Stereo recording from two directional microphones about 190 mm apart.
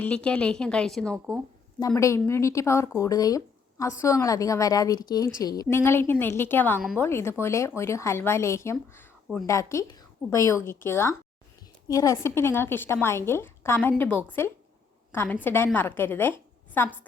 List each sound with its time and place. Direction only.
0.0 s speech: 5° left (ahead or behind)
2.0 s a woman's voice: 15° left (ahead or behind)